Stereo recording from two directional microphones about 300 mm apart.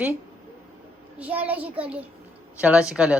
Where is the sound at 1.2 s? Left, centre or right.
Centre.